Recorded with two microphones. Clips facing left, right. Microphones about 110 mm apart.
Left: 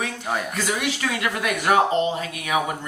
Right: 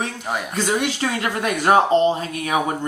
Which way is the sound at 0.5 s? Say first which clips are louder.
Right 4 dB; 35° right (ahead or behind).